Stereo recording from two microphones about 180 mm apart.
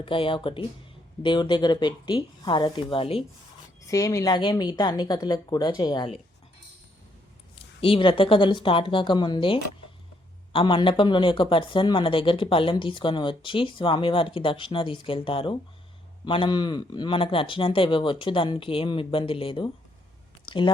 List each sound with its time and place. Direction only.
0.0 s speech: 30° left (ahead or behind)
3.8 s speech: 20° left (ahead or behind)
7.8 s speech: 30° left (ahead or behind)
20.4 s a sound: 25° left (ahead or behind)